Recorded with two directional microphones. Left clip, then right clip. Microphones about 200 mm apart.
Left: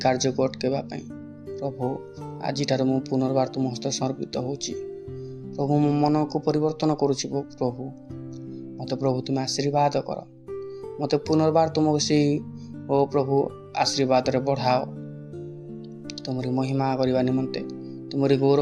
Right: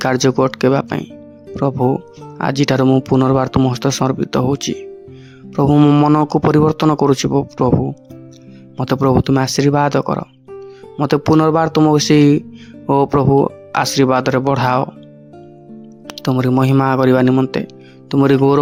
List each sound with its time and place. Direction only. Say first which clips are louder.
0.0 s speech: right 8 dB; 55° right (ahead or behind)
8.8 s speech: right 11 dB; 55° right (ahead or behind)
16.2 s speech: right 13 dB; 55° right (ahead or behind)